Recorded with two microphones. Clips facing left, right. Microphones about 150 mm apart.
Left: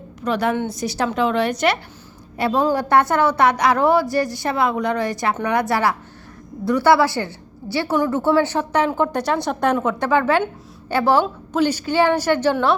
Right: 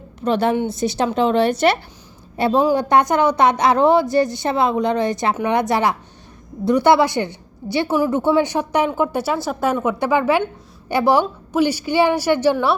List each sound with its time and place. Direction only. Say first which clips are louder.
0.2 s a woman's voice: right 3 dB; 30° right (ahead or behind)
0.5 s a woman's voice: right 3 dB; 15° right (ahead or behind)